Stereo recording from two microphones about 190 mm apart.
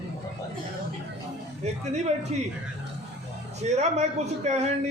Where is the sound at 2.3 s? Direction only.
35° right (ahead or behind).